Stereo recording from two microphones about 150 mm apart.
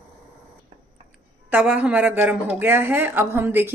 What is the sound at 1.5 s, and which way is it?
A woman's voice, 10° right (ahead or behind).